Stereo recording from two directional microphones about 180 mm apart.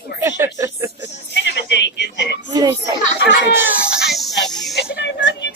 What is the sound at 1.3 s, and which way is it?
A woman's voice, 70° left (ahead or behind).